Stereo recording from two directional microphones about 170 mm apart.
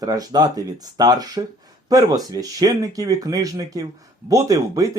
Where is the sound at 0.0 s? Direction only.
20° right (ahead or behind).